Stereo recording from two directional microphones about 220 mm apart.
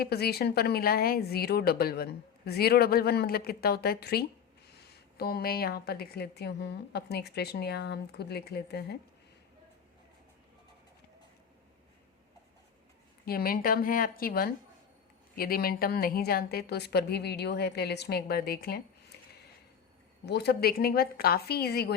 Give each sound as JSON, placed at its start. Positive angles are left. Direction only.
{"t": 0.0, "sound": "speech", "side_deg": 45}
{"t": 13.2, "sound": "a woman's voice", "side_deg": 40}
{"t": 19.1, "sound": "a sound", "side_deg": 50}
{"t": 20.2, "sound": "speech", "side_deg": 50}